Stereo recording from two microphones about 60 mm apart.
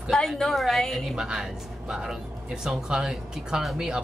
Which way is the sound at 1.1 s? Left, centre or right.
Centre.